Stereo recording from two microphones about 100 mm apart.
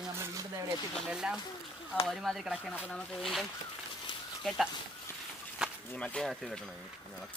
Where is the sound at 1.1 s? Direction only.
5° right (ahead or behind).